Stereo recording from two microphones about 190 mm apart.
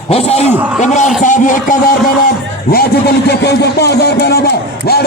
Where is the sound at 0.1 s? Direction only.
35° left (ahead or behind).